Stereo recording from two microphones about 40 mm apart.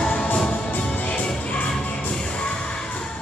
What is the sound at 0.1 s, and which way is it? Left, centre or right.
Music, left.